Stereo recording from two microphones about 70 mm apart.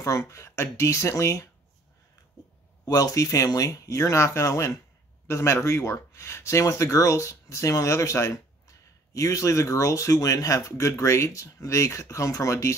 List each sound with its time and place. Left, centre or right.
0.2 s speech: left
2.9 s speech: left